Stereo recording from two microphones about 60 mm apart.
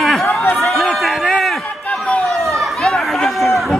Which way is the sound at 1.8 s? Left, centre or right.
Left.